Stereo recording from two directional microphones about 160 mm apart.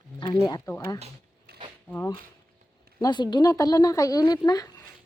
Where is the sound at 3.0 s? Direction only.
25° left (ahead or behind).